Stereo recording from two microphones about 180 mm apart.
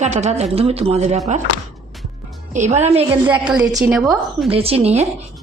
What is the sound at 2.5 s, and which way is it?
Speech, 40° right (ahead or behind).